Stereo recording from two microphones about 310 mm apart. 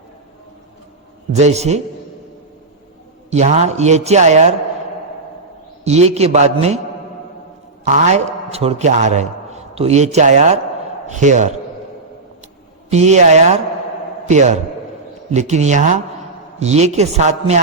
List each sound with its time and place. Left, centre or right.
1.3 s a man's voice: right
3.2 s a man's voice: right
5.8 s a man's voice: right
7.9 s a man's voice: right
12.9 s a man's voice: right